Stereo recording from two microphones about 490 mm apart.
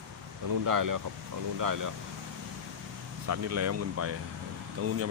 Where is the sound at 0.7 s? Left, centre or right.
Right.